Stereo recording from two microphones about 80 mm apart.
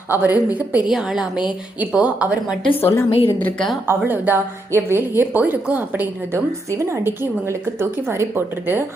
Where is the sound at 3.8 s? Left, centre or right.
Right.